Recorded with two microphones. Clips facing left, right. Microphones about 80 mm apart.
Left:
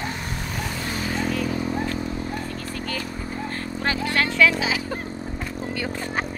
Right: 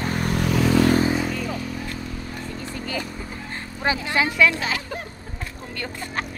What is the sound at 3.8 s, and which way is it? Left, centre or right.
Speech, centre.